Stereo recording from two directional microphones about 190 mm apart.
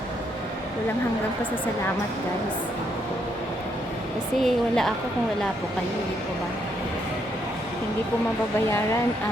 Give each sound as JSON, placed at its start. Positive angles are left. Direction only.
{"t": 4.4, "sound": "speech", "side_deg": 0}